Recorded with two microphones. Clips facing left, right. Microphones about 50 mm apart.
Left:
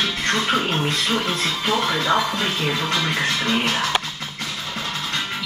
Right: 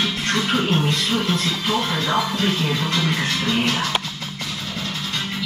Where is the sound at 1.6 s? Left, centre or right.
Centre.